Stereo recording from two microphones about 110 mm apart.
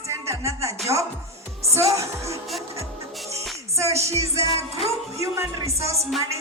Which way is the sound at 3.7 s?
25° right (ahead or behind).